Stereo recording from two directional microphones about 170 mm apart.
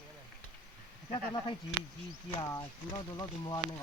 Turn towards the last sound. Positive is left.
turn(degrees=25)  # may be behind; listen again after turning